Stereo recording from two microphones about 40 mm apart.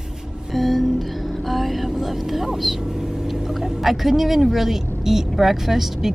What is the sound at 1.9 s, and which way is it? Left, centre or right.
Speech, centre.